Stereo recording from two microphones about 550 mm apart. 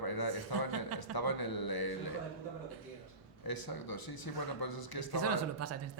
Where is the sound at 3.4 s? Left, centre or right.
Left.